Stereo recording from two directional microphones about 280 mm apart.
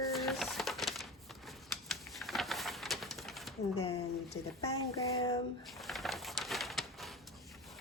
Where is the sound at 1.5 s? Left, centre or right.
Centre.